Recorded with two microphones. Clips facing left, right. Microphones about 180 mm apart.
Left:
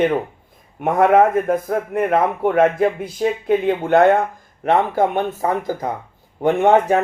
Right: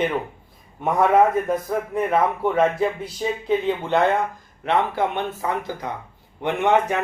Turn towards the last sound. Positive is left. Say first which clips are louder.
# left 6 dB
turn(degrees=40)  # may be behind; listen again after turning